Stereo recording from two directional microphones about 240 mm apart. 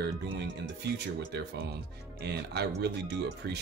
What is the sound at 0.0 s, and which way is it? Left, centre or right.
Speech, right.